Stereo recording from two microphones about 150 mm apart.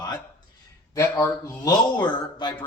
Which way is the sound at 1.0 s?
15° left (ahead or behind).